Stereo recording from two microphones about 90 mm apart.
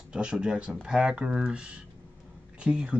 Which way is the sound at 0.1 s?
10° right (ahead or behind).